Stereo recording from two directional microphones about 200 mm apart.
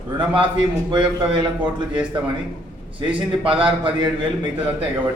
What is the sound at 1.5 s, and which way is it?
Speech, 5° right (ahead or behind).